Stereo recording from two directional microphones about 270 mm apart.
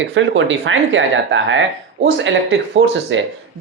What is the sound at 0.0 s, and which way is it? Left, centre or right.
Speech, right.